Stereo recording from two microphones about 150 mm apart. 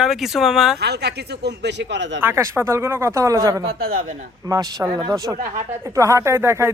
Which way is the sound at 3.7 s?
65° right (ahead or behind).